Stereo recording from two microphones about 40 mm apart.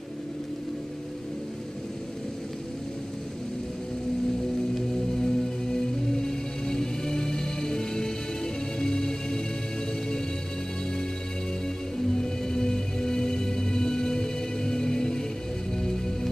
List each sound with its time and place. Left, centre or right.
4.7 s music: centre
12.2 s music: centre